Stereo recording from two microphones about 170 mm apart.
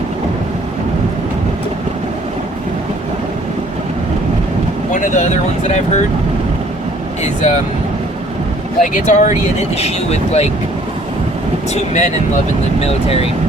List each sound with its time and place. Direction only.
4.9 s speech: 50° left (ahead or behind)
7.2 s speech: 45° left (ahead or behind)
8.8 s speech: 45° left (ahead or behind)
11.7 s speech: 45° left (ahead or behind)